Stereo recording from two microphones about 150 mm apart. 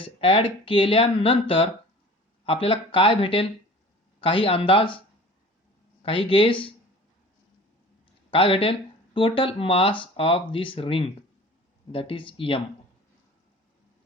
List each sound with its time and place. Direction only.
0.0 s speech: 40° left (ahead or behind)
6.0 s speech: 35° left (ahead or behind)
8.3 s speech: 35° left (ahead or behind)